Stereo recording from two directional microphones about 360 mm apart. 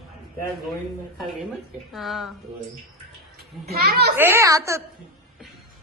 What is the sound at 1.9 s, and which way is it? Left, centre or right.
Speech, centre.